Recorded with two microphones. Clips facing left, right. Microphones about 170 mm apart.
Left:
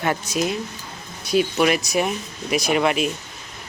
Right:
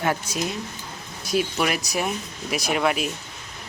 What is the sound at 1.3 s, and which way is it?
Speech, centre (ahead or behind).